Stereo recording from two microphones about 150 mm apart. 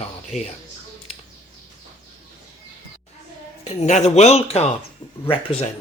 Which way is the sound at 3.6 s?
50° left (ahead or behind).